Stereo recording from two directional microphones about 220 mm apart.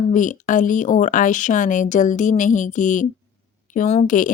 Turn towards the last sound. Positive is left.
turn(degrees=35)  # may be behind; listen again after turning